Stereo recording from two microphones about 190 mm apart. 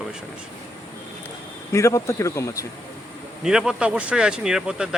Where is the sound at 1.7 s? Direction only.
15° left (ahead or behind).